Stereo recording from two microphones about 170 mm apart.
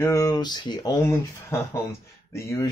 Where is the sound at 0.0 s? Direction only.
20° left (ahead or behind).